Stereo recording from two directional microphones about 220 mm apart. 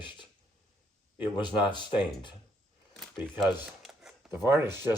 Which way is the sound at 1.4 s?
20° left (ahead or behind).